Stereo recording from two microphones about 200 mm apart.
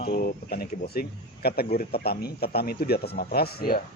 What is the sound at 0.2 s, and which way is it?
Speech, 50° left (ahead or behind).